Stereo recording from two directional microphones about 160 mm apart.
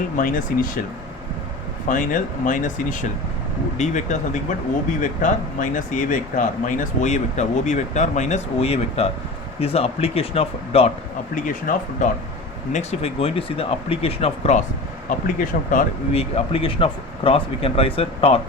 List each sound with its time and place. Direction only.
0.2 s speech: 60° left (ahead or behind)
1.9 s speech: 55° left (ahead or behind); by 10.9 s 40° left (ahead or behind)
11.3 s speech: 55° left (ahead or behind)
12.7 s speech: 40° left (ahead or behind)
15.5 s speech: 60° left (ahead or behind)
16.1 s speech: 40° left (ahead or behind)